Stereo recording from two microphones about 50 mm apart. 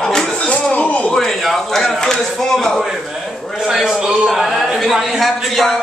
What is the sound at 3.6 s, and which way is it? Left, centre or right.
Speech, centre.